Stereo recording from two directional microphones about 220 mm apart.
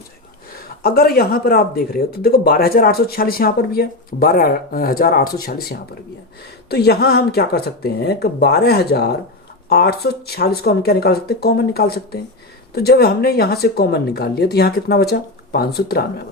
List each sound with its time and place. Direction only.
0.8 s speech: 45° left (ahead or behind)